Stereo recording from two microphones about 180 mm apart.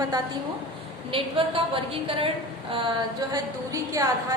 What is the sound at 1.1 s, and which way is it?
A woman's voice, 30° right (ahead or behind).